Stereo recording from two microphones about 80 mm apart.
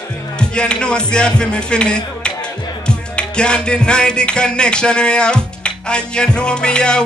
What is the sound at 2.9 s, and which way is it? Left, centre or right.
Music, centre.